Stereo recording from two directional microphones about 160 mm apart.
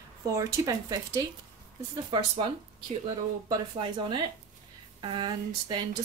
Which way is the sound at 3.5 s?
30° right (ahead or behind).